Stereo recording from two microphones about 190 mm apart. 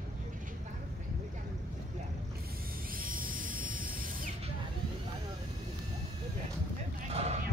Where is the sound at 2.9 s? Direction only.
45° right (ahead or behind).